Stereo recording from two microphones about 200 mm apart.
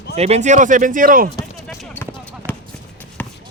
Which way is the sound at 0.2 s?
35° right (ahead or behind).